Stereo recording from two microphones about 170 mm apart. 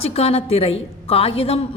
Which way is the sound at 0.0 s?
35° left (ahead or behind).